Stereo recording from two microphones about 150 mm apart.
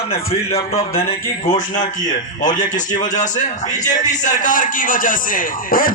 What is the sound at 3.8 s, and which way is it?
A man's voice, 55° left (ahead or behind).